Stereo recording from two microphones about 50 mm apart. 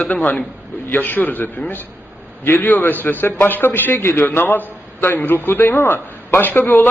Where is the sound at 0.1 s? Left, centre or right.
Left.